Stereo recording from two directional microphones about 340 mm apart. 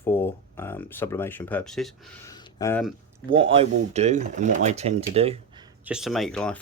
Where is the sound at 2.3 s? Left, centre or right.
Centre.